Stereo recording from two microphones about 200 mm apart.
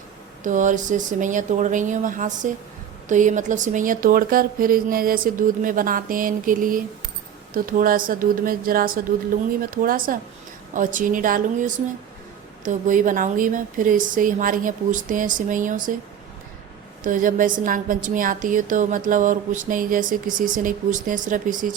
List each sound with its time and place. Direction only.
0.4 s a woman's voice: 40° right (ahead or behind)
17.0 s a woman's voice: 40° right (ahead or behind)